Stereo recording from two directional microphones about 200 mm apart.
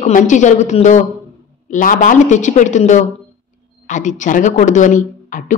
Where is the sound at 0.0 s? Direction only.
40° left (ahead or behind).